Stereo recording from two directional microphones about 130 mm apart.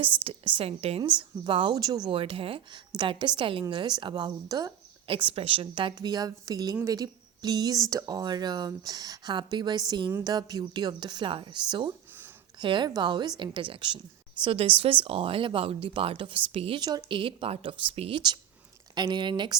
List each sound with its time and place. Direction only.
0.3 s a woman's voice: 45° right (ahead or behind); by 4.7 s 30° right (ahead or behind)
5.0 s speech: 40° right (ahead or behind)
5.9 s a woman's voice: 30° right (ahead or behind); by 18.2 s 45° right (ahead or behind)
18.9 s a woman's voice: 35° right (ahead or behind)